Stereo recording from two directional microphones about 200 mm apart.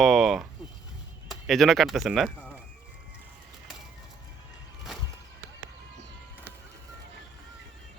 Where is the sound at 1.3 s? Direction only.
Centre (ahead or behind).